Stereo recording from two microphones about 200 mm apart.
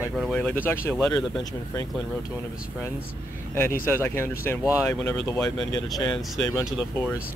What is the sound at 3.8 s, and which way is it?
Speech, 10° left (ahead or behind).